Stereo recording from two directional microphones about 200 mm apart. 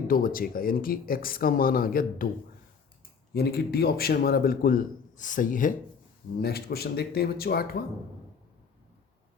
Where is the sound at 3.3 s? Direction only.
50° left (ahead or behind).